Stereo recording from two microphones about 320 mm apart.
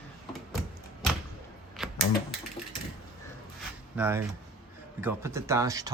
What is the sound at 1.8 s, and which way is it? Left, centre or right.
Typewriter, centre.